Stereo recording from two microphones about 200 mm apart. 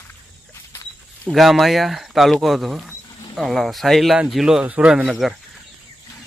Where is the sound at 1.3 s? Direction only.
Centre (ahead or behind).